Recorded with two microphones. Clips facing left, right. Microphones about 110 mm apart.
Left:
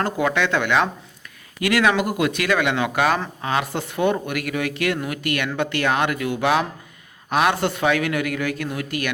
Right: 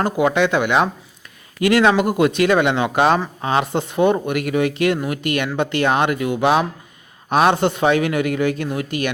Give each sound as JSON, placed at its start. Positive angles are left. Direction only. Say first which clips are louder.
{"t": 0.0, "sound": "speech", "louder": "right 4 dB", "side_deg": -20}